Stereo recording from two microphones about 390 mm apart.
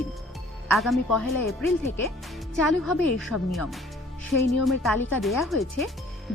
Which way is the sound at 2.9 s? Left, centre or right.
Centre.